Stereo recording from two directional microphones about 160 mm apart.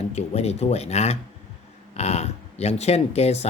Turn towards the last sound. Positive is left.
turn(degrees=40)  # may be behind; listen again after turning